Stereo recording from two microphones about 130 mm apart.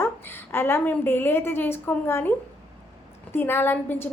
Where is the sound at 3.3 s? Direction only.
15° left (ahead or behind).